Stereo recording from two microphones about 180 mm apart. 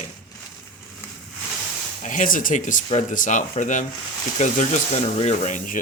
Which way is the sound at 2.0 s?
45° left (ahead or behind).